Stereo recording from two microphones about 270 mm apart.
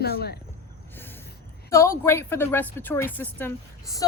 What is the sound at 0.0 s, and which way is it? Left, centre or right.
Speech, left.